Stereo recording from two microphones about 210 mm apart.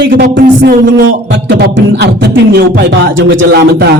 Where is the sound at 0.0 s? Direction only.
50° right (ahead or behind).